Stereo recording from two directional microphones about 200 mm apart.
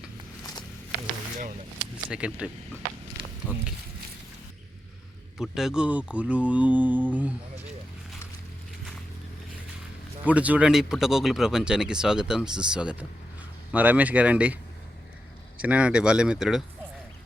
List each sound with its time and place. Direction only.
2.0 s speech: 5° right (ahead or behind)
3.2 s a sound: 25° right (ahead or behind)
5.4 s speech: centre (ahead or behind)
10.2 s speech: 5° right (ahead or behind)